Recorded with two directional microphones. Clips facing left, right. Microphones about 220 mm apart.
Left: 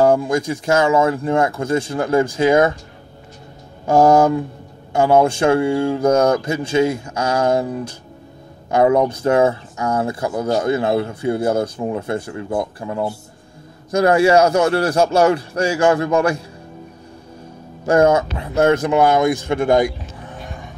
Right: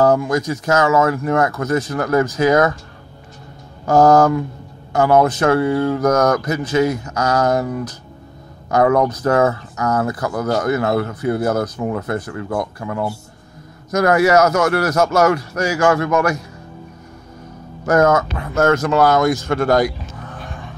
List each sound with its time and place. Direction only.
0.0 s speech: 30° left (ahead or behind)
3.8 s a man's voice: 25° left (ahead or behind)
17.8 s speech: 30° left (ahead or behind)